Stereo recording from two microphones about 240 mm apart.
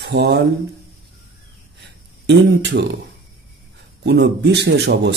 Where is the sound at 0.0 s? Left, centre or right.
Right.